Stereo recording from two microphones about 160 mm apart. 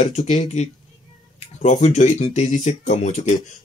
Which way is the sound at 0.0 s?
50° left (ahead or behind).